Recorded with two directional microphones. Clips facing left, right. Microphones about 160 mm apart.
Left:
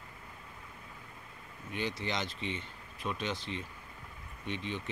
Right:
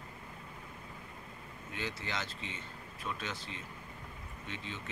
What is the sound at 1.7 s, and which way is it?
Speech, 20° left (ahead or behind).